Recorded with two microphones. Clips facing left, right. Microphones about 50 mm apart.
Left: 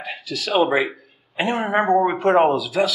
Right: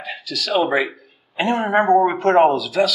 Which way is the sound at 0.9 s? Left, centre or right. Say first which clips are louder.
Right 1 dB; centre.